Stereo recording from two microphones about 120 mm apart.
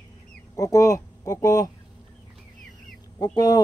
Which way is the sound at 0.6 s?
30° left (ahead or behind).